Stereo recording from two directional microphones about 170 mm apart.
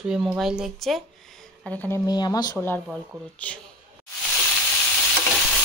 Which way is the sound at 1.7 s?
10° left (ahead or behind).